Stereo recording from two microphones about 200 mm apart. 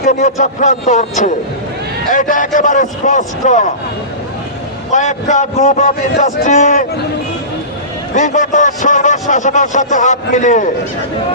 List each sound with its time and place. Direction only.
0.0 s a man's voice: 35° left (ahead or behind)
4.9 s a man's voice: 40° left (ahead or behind)
8.1 s a man's voice: 40° left (ahead or behind)